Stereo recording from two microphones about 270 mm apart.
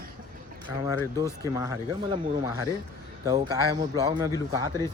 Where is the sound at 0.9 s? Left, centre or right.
Centre.